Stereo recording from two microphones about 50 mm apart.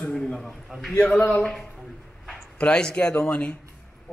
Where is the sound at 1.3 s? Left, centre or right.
Centre.